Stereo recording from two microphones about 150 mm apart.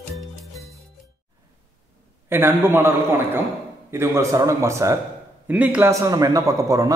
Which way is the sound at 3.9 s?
15° right (ahead or behind).